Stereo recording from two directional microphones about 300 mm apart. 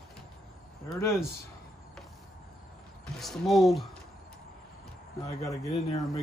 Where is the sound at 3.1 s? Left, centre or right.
Centre.